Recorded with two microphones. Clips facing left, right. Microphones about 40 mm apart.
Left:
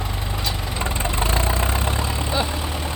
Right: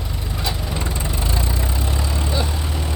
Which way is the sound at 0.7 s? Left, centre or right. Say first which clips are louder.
Left 2 dB; left.